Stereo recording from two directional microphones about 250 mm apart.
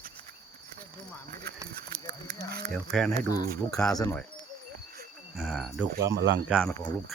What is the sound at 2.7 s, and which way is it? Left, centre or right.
Speech, centre.